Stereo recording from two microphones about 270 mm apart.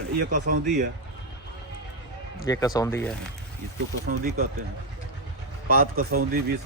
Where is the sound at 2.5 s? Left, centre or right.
Centre.